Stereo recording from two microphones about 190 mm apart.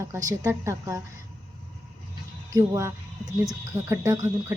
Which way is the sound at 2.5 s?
15° right (ahead or behind).